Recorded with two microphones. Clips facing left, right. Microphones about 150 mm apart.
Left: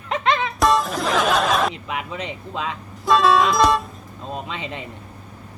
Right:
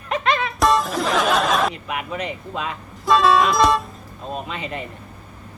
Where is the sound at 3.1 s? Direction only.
Centre (ahead or behind).